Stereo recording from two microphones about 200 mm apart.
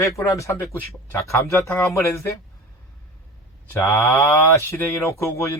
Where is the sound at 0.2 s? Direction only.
15° left (ahead or behind).